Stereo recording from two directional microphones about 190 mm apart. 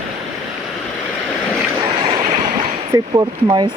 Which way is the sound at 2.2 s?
35° right (ahead or behind).